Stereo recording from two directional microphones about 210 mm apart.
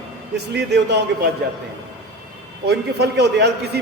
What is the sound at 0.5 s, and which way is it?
Speech, 55° right (ahead or behind).